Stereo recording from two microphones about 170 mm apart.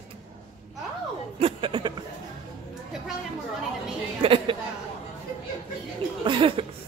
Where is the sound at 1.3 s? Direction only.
30° right (ahead or behind).